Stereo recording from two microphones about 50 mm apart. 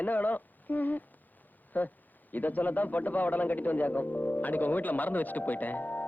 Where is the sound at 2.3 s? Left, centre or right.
Left.